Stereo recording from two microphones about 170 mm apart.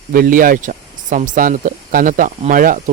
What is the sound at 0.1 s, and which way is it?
Speech, 55° right (ahead or behind).